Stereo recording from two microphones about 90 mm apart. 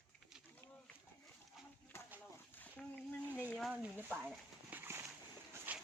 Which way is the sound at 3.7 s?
20° right (ahead or behind).